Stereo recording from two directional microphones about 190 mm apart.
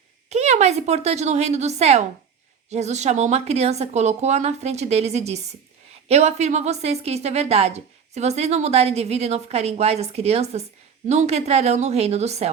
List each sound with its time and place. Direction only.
0.3 s a woman's voice: 35° right (ahead or behind)